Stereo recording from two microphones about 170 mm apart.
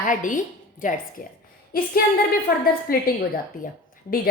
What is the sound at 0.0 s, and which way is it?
A woman's voice, 50° left (ahead or behind).